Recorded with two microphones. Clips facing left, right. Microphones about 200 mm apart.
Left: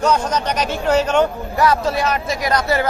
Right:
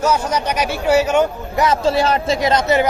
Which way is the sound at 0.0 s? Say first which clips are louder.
Even; 10° right (ahead or behind).